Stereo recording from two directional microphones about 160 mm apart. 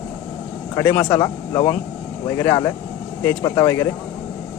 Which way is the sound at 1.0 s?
25° left (ahead or behind).